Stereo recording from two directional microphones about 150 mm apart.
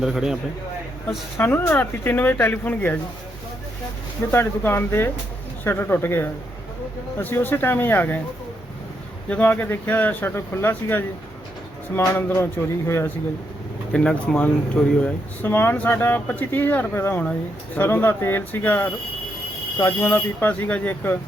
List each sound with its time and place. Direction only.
0.0 s a man's voice: 5° right (ahead or behind)
1.4 s speech: 15° left (ahead or behind)
4.3 s speech: 15° left (ahead or behind)
9.3 s speech: 10° left (ahead or behind)
13.9 s speech: 5° left (ahead or behind)